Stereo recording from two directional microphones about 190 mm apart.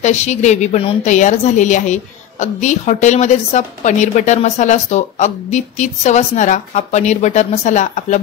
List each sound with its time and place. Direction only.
0.0 s a woman's voice: 35° left (ahead or behind)